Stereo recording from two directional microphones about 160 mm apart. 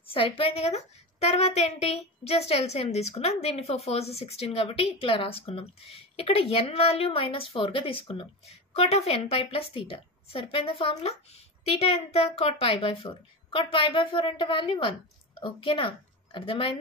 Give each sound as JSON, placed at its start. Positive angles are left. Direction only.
{"t": 0.1, "sound": "a woman's voice", "side_deg": 35}